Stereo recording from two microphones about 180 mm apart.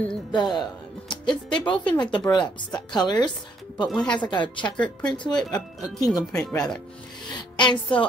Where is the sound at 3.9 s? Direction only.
5° left (ahead or behind).